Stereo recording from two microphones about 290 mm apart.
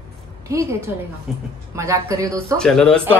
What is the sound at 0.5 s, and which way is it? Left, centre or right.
Speech, centre.